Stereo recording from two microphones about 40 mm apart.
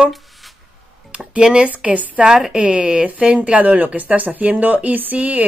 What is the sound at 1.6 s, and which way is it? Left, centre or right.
Speech, right.